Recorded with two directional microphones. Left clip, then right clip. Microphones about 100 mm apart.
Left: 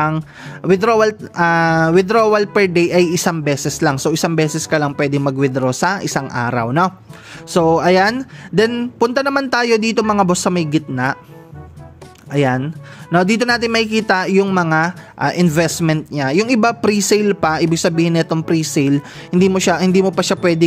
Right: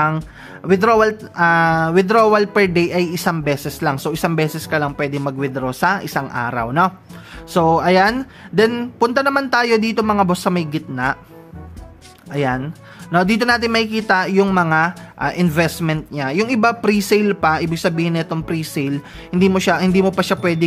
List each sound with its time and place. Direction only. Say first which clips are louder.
0.6 s speech: even; 50° left (ahead or behind)
12.3 s speech: left 3 dB; 45° left (ahead or behind)